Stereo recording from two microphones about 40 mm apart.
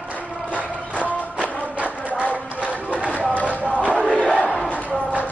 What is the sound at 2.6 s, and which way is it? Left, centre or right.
Run, right.